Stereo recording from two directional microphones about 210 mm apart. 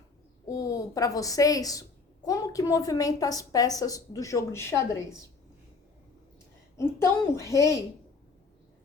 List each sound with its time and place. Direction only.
0.4 s a woman's voice: 15° left (ahead or behind)
6.7 s a woman's voice: 15° left (ahead or behind)